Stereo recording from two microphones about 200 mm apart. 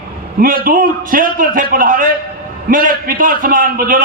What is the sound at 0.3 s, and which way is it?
A man's voice, 45° right (ahead or behind).